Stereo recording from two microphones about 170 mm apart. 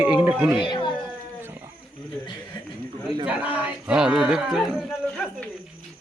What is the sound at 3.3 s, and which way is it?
Livestock, 10° right (ahead or behind).